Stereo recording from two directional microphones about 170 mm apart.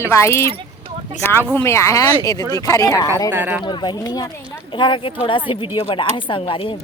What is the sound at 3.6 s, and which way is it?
Speech, 25° left (ahead or behind).